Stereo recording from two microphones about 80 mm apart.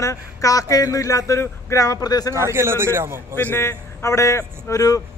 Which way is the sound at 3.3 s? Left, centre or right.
Left.